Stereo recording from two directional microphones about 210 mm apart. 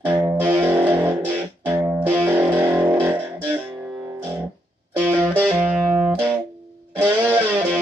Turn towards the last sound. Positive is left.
turn(degrees=-10)  # may be behind; listen again after turning